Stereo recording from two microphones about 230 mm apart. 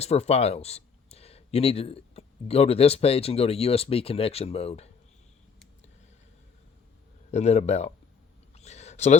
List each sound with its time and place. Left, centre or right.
0.0 s speech: left
7.3 s speech: left
8.5 s a sound: left